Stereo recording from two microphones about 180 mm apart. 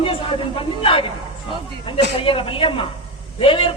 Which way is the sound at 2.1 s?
30° left (ahead or behind).